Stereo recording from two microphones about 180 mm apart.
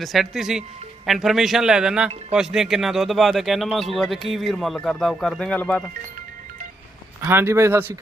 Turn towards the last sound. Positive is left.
turn(degrees=-15)  # may be behind; listen again after turning